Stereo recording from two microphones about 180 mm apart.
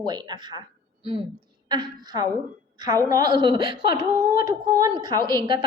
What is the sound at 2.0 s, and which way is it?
A woman's voice, 20° right (ahead or behind).